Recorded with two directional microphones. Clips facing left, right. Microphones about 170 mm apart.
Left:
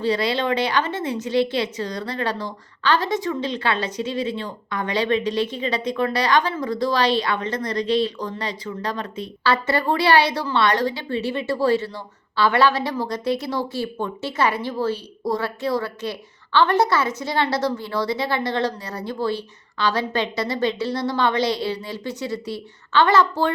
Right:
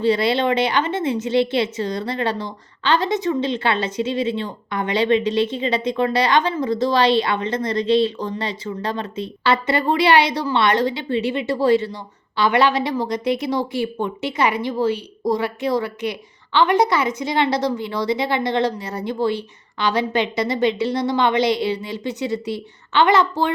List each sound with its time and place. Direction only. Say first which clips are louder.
0.0 s a woman's voice: right 4 dB; 25° right (ahead or behind)